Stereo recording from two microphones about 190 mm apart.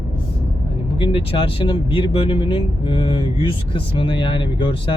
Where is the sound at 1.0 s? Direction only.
25° left (ahead or behind).